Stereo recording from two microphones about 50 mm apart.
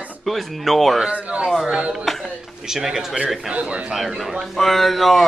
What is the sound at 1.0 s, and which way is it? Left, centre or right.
Speech, right.